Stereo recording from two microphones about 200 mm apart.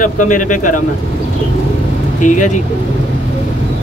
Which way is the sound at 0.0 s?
40° left (ahead or behind).